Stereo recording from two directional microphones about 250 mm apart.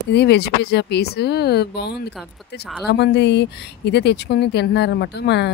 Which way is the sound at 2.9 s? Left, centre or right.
Left.